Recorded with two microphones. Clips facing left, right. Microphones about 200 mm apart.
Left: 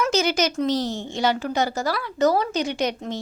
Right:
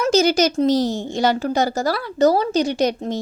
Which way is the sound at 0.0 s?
40° right (ahead or behind).